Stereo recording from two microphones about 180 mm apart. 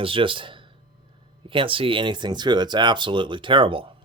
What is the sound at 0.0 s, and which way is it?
Speech, 30° right (ahead or behind).